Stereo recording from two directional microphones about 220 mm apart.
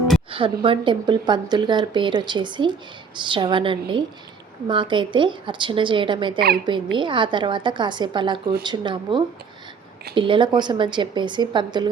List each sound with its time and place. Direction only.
0.3 s speech: 25° right (ahead or behind)